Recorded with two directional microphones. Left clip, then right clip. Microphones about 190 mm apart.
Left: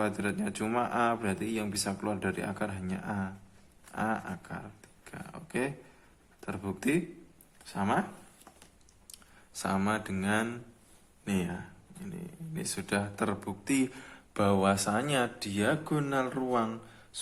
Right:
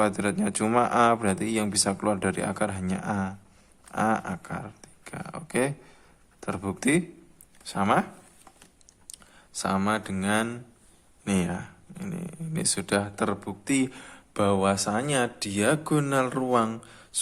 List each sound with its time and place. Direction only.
0.0 s speech: 30° right (ahead or behind)
7.6 s speech: 40° right (ahead or behind)
9.1 s speech: 25° right (ahead or behind)
11.3 s speech: 40° right (ahead or behind)